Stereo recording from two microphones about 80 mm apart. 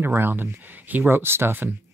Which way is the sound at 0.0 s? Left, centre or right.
Right.